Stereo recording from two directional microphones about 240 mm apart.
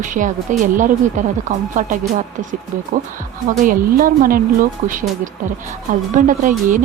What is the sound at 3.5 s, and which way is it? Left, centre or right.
Speech, right.